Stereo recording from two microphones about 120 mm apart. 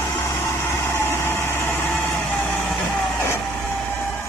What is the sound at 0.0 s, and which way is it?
Vehicle, 20° left (ahead or behind).